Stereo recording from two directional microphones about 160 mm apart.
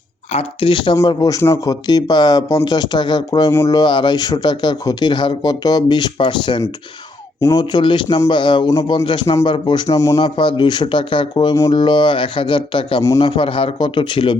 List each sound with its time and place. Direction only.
0.3 s speech: 35° left (ahead or behind)
10.2 s speech: 30° left (ahead or behind)